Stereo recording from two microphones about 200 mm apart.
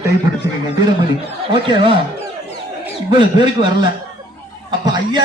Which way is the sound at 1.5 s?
25° right (ahead or behind).